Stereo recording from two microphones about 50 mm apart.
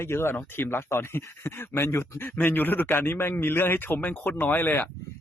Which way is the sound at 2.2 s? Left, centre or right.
Left.